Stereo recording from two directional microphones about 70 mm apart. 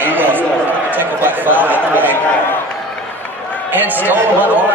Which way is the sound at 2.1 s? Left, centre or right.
Left.